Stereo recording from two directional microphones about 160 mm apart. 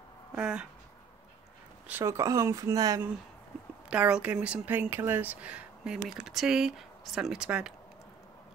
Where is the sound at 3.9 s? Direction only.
5° right (ahead or behind).